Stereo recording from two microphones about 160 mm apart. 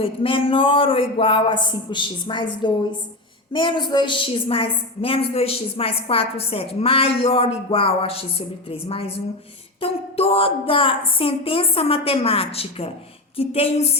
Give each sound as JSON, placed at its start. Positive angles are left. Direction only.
{"t": 0.0, "sound": "a woman's voice", "side_deg": 35}